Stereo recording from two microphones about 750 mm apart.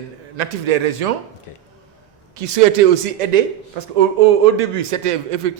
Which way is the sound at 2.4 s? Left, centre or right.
Right.